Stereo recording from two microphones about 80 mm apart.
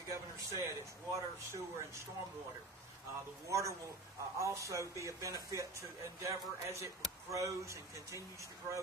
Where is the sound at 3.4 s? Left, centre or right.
Right.